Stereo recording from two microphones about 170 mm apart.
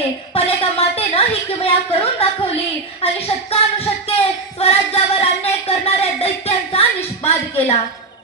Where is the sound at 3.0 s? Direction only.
35° left (ahead or behind).